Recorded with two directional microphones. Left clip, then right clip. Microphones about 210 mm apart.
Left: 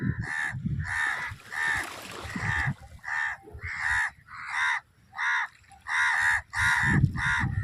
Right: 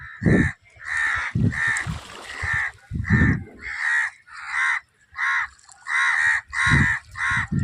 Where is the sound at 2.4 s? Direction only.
50° right (ahead or behind).